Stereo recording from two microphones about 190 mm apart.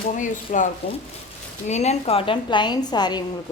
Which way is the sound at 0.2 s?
40° left (ahead or behind).